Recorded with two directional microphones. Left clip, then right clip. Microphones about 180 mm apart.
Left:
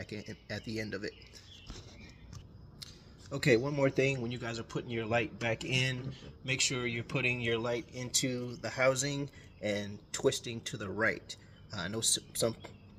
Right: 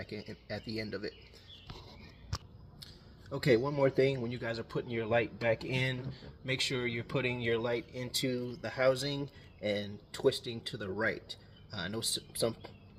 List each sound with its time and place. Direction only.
0.0 s speech: 45° left (ahead or behind)
2.8 s speech: 40° left (ahead or behind)